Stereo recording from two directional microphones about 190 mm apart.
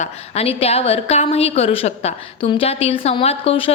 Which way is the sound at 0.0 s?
30° left (ahead or behind).